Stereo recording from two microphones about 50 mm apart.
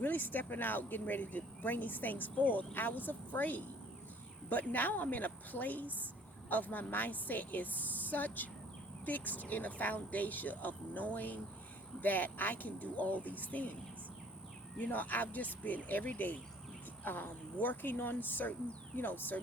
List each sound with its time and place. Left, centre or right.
0.0 s speech: left
14.8 s speech: left